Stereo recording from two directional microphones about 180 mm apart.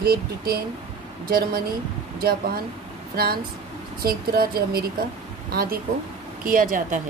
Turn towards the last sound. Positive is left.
turn(degrees=-50)  # may be behind; listen again after turning